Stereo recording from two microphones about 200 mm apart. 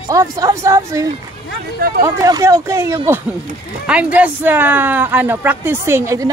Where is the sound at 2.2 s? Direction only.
15° right (ahead or behind).